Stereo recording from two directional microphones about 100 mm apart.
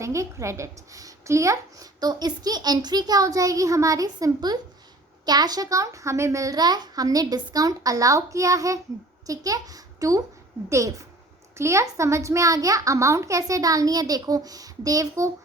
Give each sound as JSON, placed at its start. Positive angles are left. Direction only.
{"t": 0.0, "sound": "a woman's voice", "side_deg": -30}